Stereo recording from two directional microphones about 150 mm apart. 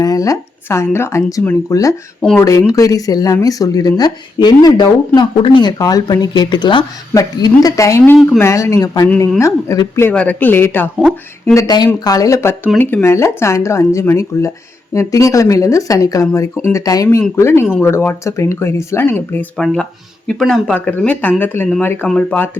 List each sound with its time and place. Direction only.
0.0 s speech: 25° left (ahead or behind)
11.5 s speech: 25° left (ahead or behind); by 22.4 s 10° left (ahead or behind)